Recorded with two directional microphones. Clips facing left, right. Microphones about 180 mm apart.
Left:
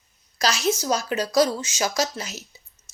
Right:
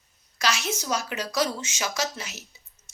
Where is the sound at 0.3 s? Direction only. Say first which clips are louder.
Left 5 dB; 35° left (ahead or behind).